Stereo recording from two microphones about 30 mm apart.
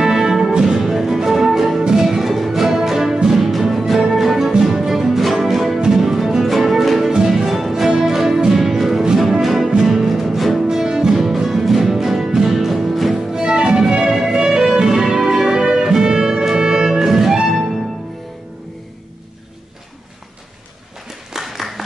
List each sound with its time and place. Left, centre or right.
0.0 s music: centre
5.9 s music: centre
10.6 s music: centre
11.1 s music: centre
12.5 s music: centre
13.1 s music: right
21.4 s a sound: centre